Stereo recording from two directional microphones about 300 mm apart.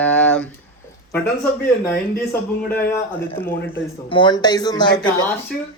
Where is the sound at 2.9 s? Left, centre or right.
Centre.